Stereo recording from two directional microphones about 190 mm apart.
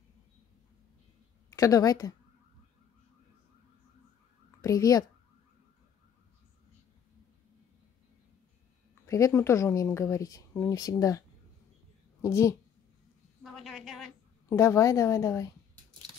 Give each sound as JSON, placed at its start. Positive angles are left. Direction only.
{"t": 1.5, "sound": "a woman's voice", "side_deg": 20}
{"t": 4.6, "sound": "a woman's voice", "side_deg": 20}
{"t": 9.0, "sound": "a woman's voice", "side_deg": 15}
{"t": 13.4, "sound": "a sound", "side_deg": 0}
{"t": 14.5, "sound": "speech", "side_deg": 15}